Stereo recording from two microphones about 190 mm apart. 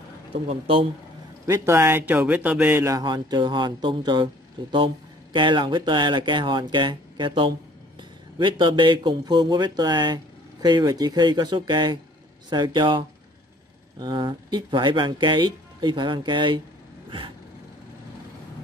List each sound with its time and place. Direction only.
0.7 s speech: 30° right (ahead or behind)
1.4 s speech: 15° right (ahead or behind)